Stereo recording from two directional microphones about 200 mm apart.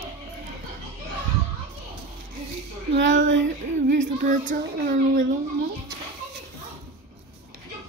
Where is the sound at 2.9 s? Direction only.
65° right (ahead or behind).